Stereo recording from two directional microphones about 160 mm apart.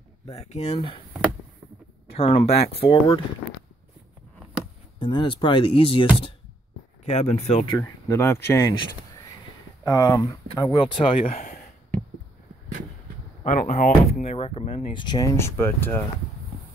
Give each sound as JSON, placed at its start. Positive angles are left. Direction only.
{"t": 0.4, "sound": "speech", "side_deg": 40}
{"t": 2.1, "sound": "speech", "side_deg": 35}
{"t": 4.9, "sound": "speech", "side_deg": 30}
{"t": 7.1, "sound": "speech", "side_deg": 45}
{"t": 9.8, "sound": "speech", "side_deg": 20}
{"t": 13.4, "sound": "speech", "side_deg": 50}
{"t": 14.2, "sound": "speech", "side_deg": 40}